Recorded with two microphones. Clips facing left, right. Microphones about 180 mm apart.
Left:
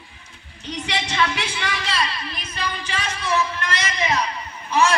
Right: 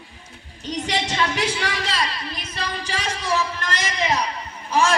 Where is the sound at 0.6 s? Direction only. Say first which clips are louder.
Right 3 dB; 40° right (ahead or behind).